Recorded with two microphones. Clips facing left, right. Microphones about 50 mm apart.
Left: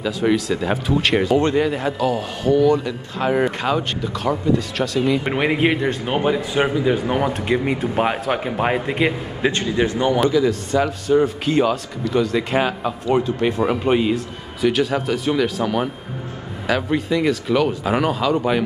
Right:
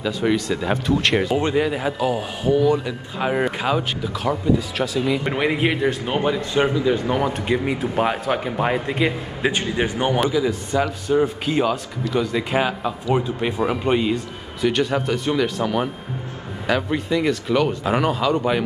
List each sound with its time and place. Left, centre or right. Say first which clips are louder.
0.0 s speech: left 2 dB; centre
1.3 s speech: left 3 dB; centre
5.2 s speech: left 2 dB; centre
9.8 s a man's voice: left 4 dB; right
10.2 s speech: left 3 dB; centre